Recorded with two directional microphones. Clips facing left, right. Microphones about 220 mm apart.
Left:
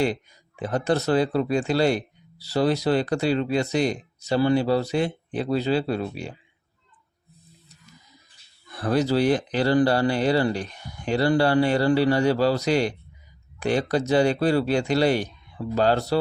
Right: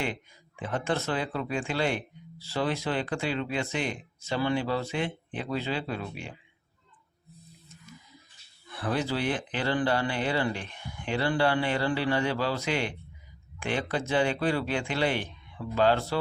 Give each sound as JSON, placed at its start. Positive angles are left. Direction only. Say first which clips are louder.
{"t": 0.0, "sound": "speech", "louder": "left 9 dB", "side_deg": 40}
{"t": 8.7, "sound": "speech", "louder": "left 8 dB", "side_deg": 40}